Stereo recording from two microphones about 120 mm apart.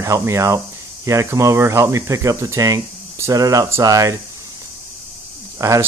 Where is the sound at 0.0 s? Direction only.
25° right (ahead or behind).